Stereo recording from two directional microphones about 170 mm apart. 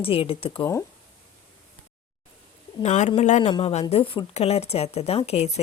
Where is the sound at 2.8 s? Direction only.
45° left (ahead or behind).